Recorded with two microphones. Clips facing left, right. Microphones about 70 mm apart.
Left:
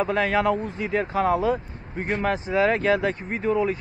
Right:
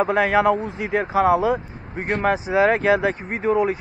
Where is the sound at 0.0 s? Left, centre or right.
Centre.